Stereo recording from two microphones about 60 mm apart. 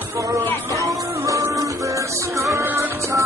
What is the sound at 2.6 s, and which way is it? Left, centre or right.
Music, right.